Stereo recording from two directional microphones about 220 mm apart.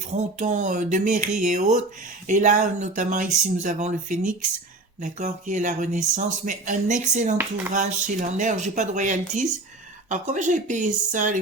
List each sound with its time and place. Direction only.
0.1 s speech: 35° right (ahead or behind)